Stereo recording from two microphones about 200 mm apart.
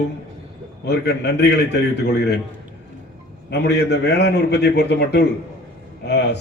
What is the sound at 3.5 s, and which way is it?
A man's voice, 55° left (ahead or behind).